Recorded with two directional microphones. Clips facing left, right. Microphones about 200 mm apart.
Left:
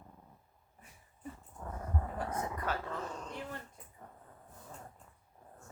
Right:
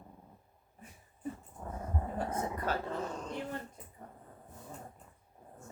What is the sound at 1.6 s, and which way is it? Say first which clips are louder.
Dog: even; 15° right (ahead or behind).